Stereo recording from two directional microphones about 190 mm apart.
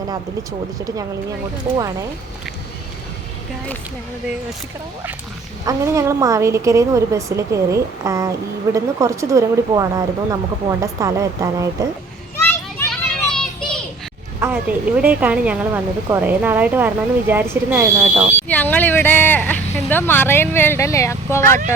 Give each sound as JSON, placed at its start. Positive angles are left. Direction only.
{"t": 5.6, "sound": "a woman's voice", "side_deg": -15}
{"t": 12.4, "sound": "children playing", "side_deg": 5}
{"t": 14.4, "sound": "a woman's voice", "side_deg": -10}
{"t": 18.4, "sound": "speech", "side_deg": 10}